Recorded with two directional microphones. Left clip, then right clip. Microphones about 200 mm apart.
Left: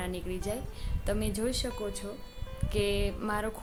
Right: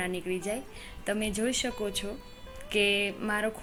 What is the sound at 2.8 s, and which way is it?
Speech, centre (ahead or behind).